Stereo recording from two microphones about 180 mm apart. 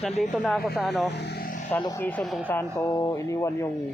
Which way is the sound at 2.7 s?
15° left (ahead or behind).